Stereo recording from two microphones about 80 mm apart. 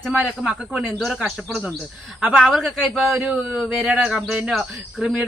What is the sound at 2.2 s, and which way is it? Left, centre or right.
Speech, centre.